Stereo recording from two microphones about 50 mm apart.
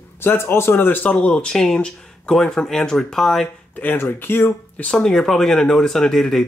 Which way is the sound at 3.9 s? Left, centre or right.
Left.